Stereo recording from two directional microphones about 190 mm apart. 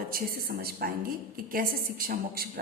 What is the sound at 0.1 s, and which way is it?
A woman's voice, 50° right (ahead or behind).